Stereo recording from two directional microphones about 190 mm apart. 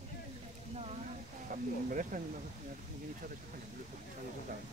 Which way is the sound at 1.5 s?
45° right (ahead or behind).